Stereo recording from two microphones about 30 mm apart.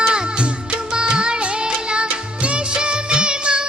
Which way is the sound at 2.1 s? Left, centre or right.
Right.